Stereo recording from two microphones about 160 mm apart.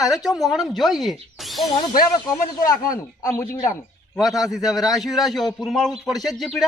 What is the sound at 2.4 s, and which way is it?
Speech, 60° left (ahead or behind).